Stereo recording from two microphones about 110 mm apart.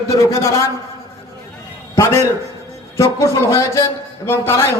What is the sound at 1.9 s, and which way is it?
A man's voice, 30° left (ahead or behind).